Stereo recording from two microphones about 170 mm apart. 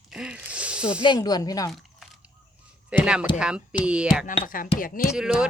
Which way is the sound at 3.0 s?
5° right (ahead or behind).